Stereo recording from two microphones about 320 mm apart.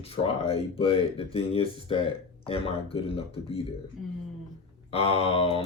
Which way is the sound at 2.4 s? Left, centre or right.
Centre.